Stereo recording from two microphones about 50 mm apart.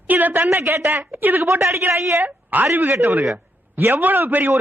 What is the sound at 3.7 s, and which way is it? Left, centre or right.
Speech, right.